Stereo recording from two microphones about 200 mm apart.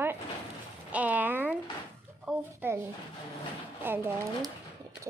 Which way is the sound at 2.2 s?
10° right (ahead or behind).